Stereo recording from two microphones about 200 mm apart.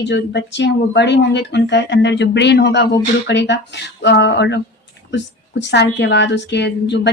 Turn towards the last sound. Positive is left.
turn(degrees=60)  # may be behind; listen again after turning